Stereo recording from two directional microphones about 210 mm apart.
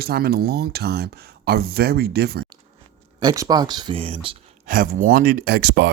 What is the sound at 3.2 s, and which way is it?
Speech, 15° right (ahead or behind).